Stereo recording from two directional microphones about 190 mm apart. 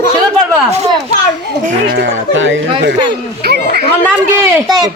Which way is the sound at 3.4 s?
55° right (ahead or behind).